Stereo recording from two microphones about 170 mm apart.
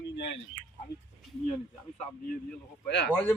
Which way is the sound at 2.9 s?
90° left.